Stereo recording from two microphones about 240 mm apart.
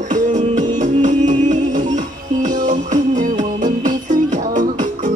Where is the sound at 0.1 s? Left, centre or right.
Right.